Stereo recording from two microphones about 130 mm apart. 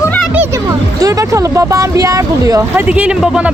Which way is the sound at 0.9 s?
25° right (ahead or behind).